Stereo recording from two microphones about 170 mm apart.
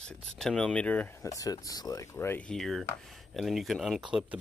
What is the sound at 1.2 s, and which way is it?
Speech, 20° left (ahead or behind).